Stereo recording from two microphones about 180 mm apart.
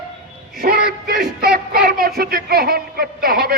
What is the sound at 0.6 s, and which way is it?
Music, 55° right (ahead or behind).